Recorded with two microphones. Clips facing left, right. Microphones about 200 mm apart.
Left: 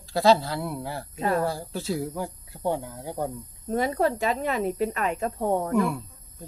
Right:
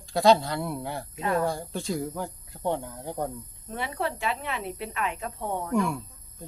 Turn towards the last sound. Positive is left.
turn(degrees=0)  # may be behind; listen again after turning